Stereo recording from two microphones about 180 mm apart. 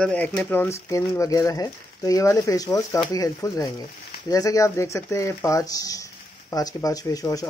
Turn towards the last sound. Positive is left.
turn(degrees=20)  # may be behind; listen again after turning